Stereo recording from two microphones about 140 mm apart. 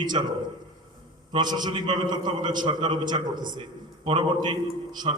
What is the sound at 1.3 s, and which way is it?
A man's voice, 30° right (ahead or behind).